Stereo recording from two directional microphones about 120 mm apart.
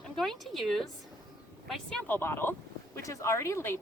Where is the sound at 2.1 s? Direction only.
20° left (ahead or behind).